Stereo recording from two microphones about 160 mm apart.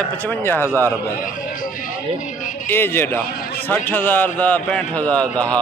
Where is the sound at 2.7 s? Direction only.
15° left (ahead or behind).